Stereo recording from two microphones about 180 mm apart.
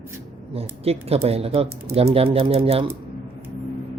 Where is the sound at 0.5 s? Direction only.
35° right (ahead or behind).